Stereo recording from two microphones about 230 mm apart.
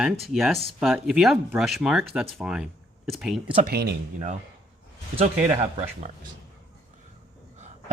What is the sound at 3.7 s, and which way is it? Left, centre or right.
Speech, right.